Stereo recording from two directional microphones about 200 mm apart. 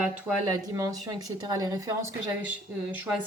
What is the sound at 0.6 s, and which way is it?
Speech, 15° right (ahead or behind).